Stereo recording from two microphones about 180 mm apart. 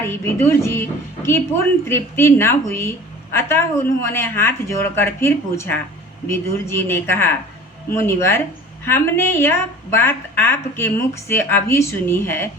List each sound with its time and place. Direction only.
0.0 s a woman's voice: 15° left (ahead or behind)